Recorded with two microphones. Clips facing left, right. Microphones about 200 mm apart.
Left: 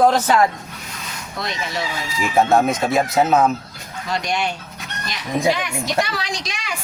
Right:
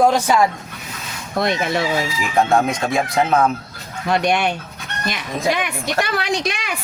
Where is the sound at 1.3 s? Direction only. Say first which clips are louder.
Right 9 dB; 55° right (ahead or behind).